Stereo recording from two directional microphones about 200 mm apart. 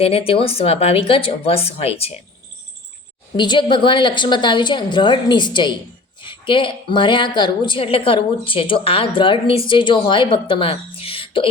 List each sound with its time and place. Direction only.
0.0 s a woman's voice: 30° left (ahead or behind)
3.3 s a woman's voice: 20° left (ahead or behind)